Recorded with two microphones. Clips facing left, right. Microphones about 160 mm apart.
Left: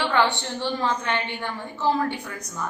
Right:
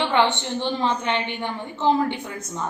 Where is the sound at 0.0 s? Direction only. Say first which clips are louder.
Right 2 dB; 20° right (ahead or behind).